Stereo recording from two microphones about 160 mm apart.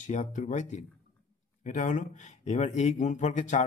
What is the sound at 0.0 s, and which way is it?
Speech, 50° left (ahead or behind).